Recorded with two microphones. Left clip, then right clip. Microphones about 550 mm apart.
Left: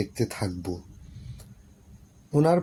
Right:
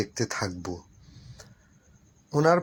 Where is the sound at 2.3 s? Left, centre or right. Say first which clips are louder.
Right 1 dB; left.